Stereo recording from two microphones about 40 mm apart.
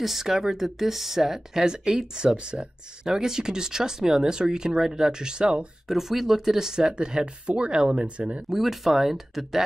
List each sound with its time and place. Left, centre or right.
0.0 s speech: centre; by 2.6 s right
3.0 s speech: centre
5.9 s speech: centre; by 8.5 s right
8.5 s speech: centre